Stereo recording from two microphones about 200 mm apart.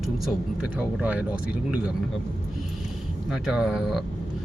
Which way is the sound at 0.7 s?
5° right (ahead or behind).